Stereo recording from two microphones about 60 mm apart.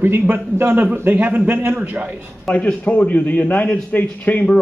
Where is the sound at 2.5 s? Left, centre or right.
Left.